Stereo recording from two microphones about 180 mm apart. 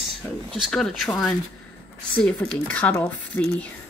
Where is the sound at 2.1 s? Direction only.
5° left (ahead or behind).